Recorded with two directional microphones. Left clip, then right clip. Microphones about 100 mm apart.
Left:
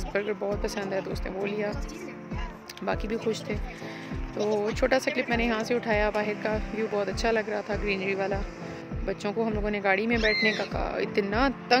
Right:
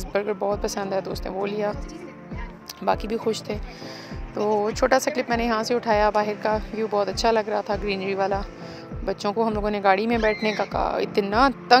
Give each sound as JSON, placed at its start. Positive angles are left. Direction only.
{"t": 0.1, "sound": "speech", "side_deg": -20}
{"t": 2.8, "sound": "speech", "side_deg": -20}